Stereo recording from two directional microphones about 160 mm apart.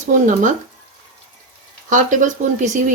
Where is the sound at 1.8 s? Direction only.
55° right (ahead or behind).